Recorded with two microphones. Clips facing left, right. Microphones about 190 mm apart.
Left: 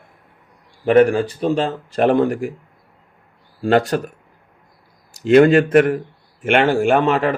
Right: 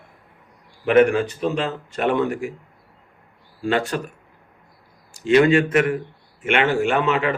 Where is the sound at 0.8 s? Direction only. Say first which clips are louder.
Left 2 dB; 35° left (ahead or behind).